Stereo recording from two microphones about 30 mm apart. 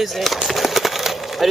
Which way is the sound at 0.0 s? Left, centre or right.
Centre.